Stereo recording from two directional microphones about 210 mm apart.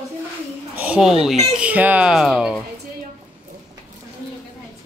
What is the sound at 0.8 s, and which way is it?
Speech, 5° right (ahead or behind).